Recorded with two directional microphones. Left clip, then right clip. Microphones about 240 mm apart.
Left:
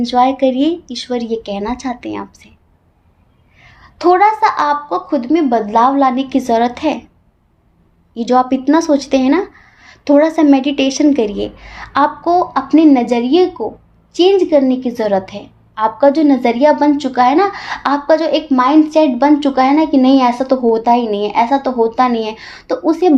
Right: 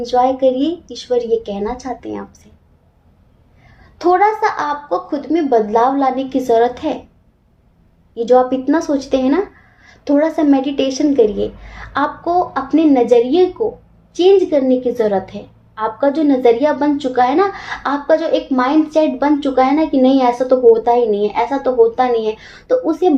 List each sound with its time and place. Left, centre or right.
0.0 s a woman's voice: left
3.9 s a woman's voice: left
8.1 s a woman's voice: left